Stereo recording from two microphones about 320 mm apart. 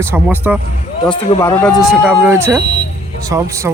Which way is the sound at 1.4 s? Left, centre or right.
Centre.